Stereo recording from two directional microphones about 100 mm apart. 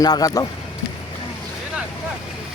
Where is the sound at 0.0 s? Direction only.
40° left (ahead or behind).